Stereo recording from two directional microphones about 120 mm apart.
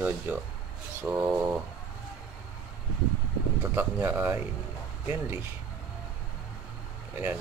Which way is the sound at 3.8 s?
15° right (ahead or behind).